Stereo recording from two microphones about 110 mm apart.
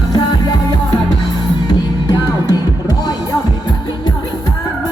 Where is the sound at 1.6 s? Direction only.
40° left (ahead or behind).